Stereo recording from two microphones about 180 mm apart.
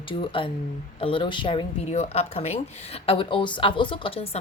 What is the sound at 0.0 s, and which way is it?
A woman's voice, 30° left (ahead or behind).